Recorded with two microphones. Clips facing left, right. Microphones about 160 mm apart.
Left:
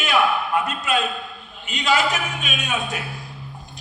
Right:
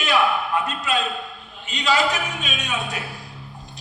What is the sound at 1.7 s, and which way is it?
A man's voice, 35° right (ahead or behind).